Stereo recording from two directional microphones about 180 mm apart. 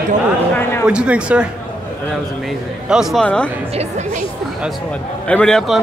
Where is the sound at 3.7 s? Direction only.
40° right (ahead or behind).